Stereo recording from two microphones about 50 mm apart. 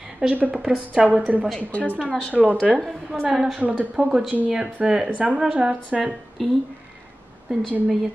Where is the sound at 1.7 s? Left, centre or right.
Left.